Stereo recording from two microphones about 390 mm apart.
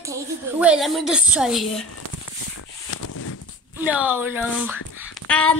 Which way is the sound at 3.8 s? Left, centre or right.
Centre.